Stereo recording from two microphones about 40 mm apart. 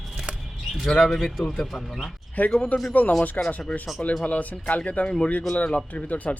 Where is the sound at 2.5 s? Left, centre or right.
Left.